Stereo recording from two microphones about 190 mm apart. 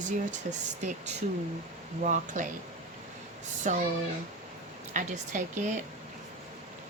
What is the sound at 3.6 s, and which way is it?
Speech, 40° right (ahead or behind).